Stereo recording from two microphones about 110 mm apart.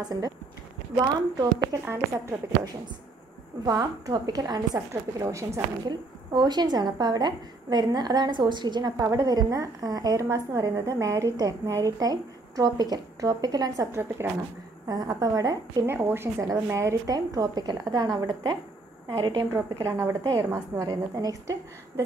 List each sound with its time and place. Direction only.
0.0 s a woman's voice: 35° right (ahead or behind)
3.6 s a woman's voice: 35° right (ahead or behind)
5.9 s a woman's voice: 40° right (ahead or behind); by 14.3 s 20° right (ahead or behind)
14.9 s a woman's voice: 35° right (ahead or behind)
15.9 s a woman's voice: 20° right (ahead or behind); by 19.4 s 45° right (ahead or behind)
19.5 s a woman's voice: 30° right (ahead or behind)